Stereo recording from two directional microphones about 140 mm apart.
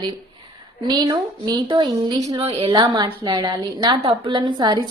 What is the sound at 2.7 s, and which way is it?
A woman's voice, 30° right (ahead or behind).